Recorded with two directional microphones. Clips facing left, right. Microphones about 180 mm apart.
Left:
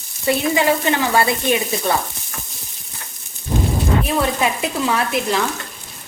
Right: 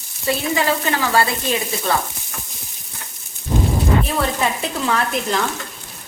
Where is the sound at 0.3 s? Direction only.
20° left (ahead or behind).